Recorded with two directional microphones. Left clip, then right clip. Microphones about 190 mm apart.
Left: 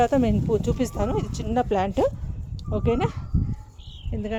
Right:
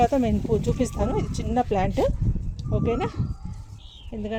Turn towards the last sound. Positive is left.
turn(degrees=-5)  # may be behind; listen again after turning